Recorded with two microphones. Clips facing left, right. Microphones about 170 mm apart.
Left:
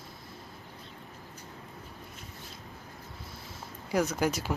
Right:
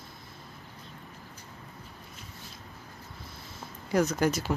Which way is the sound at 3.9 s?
10° left (ahead or behind).